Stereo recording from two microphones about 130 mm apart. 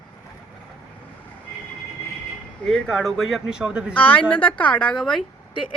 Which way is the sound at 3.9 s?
10° left (ahead or behind).